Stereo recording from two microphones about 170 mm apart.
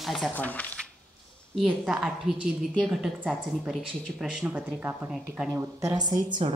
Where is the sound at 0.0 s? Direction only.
Centre (ahead or behind).